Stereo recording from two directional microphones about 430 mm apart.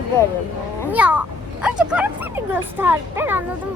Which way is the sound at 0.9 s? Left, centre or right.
Centre.